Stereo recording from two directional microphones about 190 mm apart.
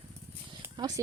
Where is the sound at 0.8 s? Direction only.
20° right (ahead or behind).